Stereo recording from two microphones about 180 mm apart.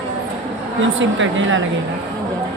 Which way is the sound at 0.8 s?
90° right.